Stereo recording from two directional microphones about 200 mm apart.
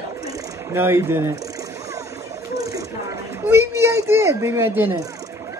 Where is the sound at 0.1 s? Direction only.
15° right (ahead or behind).